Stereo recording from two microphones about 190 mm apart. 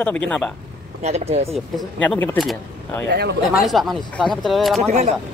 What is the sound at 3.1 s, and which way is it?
Speech, 60° right (ahead or behind).